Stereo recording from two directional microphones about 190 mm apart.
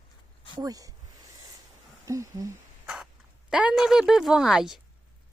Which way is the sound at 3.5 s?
Centre (ahead or behind).